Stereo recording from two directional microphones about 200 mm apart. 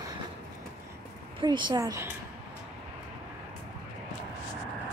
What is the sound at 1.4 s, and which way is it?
Speech, 20° right (ahead or behind).